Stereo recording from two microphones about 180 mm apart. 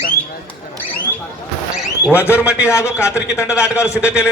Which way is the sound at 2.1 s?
15° left (ahead or behind).